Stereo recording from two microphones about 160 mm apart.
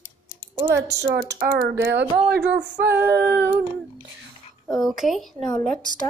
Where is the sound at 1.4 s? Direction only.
90° right.